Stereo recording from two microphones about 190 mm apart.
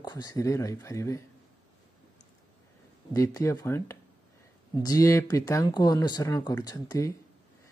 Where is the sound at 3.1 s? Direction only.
15° left (ahead or behind).